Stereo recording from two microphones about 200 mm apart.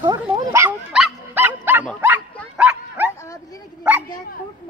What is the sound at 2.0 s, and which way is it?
Bow-wow, 5° right (ahead or behind).